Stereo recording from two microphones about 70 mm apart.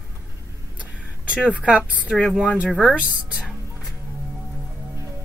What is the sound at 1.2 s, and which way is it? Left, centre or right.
Speech, centre.